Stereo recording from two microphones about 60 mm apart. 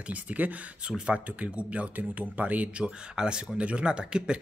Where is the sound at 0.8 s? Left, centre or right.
Centre.